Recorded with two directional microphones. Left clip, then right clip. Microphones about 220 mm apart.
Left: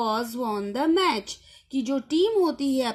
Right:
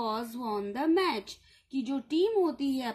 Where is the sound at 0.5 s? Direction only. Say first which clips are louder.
Left 3 dB; 30° left (ahead or behind).